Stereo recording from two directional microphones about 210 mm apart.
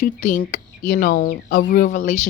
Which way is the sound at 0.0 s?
40° left (ahead or behind).